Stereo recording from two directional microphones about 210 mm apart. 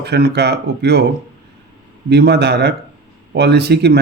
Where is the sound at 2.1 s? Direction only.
55° right (ahead or behind).